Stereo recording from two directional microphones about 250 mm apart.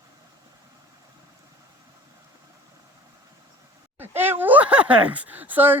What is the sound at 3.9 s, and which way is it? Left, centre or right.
Speech, centre.